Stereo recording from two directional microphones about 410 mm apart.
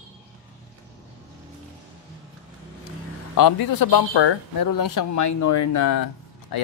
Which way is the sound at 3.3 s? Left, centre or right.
Left.